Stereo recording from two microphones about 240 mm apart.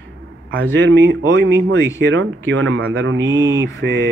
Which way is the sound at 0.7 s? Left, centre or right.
Right.